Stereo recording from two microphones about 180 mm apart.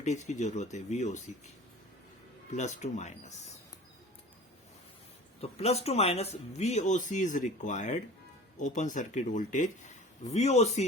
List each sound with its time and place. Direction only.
0.0 s speech: 40° left (ahead or behind)
2.5 s speech: 40° left (ahead or behind)
5.4 s speech: 35° left (ahead or behind)